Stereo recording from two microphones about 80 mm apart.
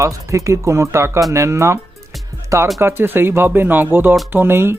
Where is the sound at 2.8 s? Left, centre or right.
Right.